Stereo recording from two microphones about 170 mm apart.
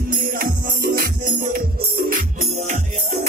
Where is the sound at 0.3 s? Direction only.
60° right (ahead or behind).